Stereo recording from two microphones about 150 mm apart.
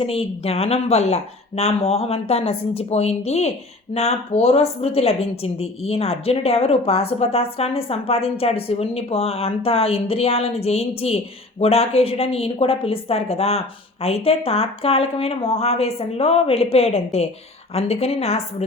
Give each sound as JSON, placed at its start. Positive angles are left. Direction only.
{"t": 0.0, "sound": "a woman's voice", "side_deg": 40}